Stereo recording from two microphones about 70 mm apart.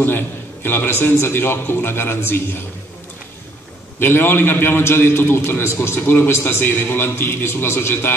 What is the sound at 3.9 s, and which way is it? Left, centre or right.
A man's voice, left.